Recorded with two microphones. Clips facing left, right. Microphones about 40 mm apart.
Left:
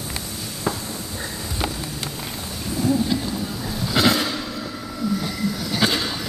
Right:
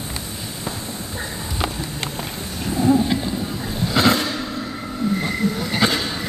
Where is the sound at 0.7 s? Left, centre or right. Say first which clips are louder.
Left 3 dB; right.